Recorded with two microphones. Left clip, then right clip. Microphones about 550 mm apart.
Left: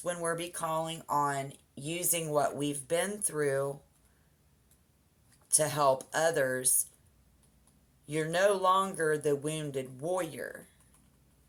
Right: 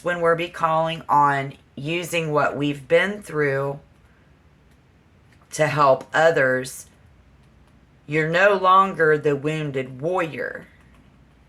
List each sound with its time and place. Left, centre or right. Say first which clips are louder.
0.0 s speech: right 14 dB; left
5.5 s speech: right 10 dB; left
8.0 s speech: right 10 dB; left